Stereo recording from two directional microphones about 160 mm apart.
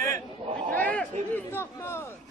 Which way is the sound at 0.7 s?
10° left (ahead or behind).